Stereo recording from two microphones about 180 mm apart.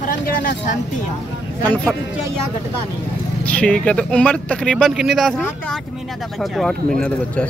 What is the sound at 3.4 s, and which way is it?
Speech, 5° left (ahead or behind).